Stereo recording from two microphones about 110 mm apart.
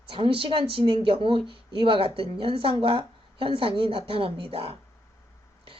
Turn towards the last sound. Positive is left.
turn(degrees=-60)  # may be behind; listen again after turning